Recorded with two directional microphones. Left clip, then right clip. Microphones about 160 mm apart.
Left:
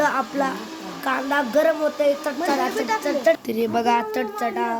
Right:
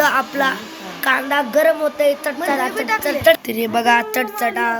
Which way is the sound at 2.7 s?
25° left (ahead or behind).